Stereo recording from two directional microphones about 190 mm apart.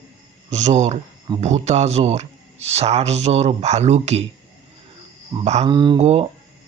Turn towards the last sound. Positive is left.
turn(degrees=-35)  # may be behind; listen again after turning